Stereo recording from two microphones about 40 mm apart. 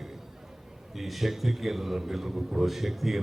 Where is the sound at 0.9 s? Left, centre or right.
Centre.